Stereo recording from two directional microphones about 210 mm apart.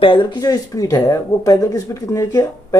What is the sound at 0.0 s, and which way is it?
Speech, 25° left (ahead or behind).